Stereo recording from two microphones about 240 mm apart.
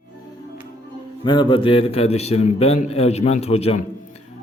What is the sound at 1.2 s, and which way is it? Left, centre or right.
A man's voice, centre.